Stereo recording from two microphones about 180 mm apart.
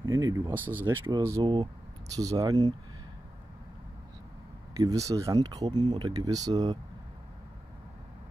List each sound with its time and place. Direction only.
0.1 s speech: 20° right (ahead or behind)
4.7 s speech: 20° right (ahead or behind)